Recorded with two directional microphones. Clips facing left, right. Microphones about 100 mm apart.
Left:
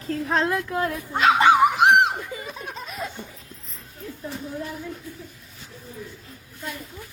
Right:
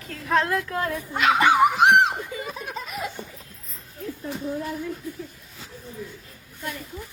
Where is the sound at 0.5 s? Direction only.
15° left (ahead or behind).